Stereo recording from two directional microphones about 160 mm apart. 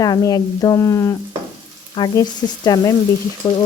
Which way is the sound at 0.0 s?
25° left (ahead or behind).